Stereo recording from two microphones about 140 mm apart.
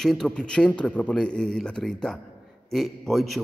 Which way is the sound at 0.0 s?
5° left (ahead or behind).